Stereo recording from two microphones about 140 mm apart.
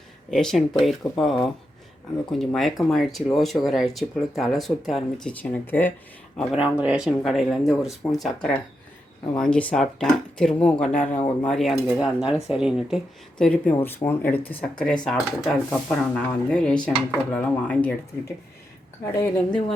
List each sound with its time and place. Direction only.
0.3 s speech: 5° left (ahead or behind)
6.5 s speech: 10° right (ahead or behind)
13.4 s speech: 10° left (ahead or behind)
19.1 s speech: 10° left (ahead or behind)